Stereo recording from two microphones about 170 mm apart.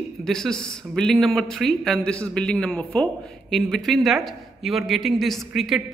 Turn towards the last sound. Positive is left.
turn(degrees=0)  # may be behind; listen again after turning